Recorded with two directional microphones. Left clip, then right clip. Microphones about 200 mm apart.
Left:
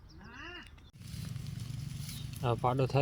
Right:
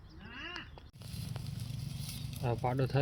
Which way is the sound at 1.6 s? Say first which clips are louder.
Right 1 dB; 45° right (ahead or behind).